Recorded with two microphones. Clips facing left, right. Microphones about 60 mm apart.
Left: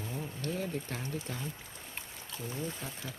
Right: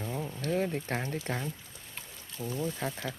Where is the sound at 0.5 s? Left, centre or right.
Right.